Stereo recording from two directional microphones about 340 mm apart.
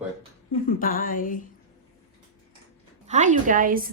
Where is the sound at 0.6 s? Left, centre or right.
Left.